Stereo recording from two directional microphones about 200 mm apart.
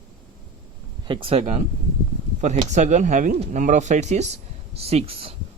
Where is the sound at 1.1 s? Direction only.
25° right (ahead or behind).